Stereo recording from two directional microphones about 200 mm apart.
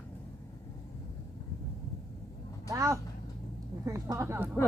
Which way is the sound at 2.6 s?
15° right (ahead or behind).